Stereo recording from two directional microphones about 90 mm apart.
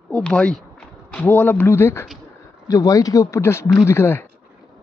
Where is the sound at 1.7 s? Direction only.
30° left (ahead or behind).